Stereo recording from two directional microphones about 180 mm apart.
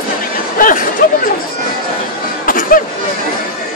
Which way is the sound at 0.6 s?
50° left (ahead or behind).